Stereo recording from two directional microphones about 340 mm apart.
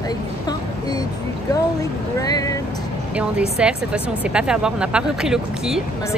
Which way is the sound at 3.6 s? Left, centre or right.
Centre.